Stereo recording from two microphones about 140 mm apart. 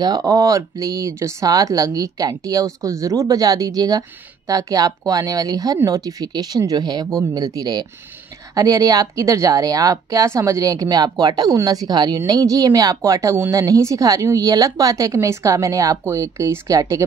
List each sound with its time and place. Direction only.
0.0 s speech: 25° right (ahead or behind)